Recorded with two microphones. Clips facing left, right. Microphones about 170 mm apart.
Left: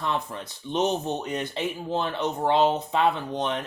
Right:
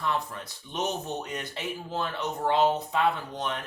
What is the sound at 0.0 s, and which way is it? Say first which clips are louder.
Speech: left 2 dB; 25° left (ahead or behind).